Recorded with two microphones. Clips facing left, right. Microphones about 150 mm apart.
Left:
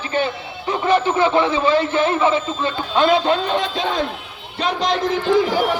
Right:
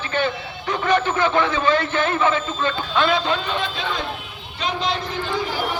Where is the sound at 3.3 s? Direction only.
40° left (ahead or behind).